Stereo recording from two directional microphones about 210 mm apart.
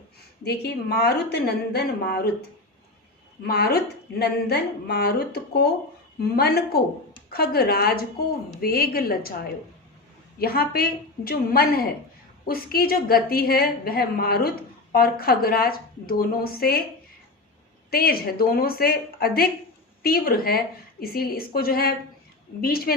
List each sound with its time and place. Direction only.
0.4 s a woman's voice: 50° left (ahead or behind)
3.4 s a woman's voice: 50° left (ahead or behind)
17.9 s a woman's voice: 45° left (ahead or behind)